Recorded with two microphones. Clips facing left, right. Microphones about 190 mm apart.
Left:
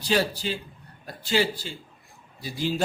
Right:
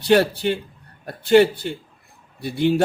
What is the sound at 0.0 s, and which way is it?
Speech, 65° right (ahead or behind).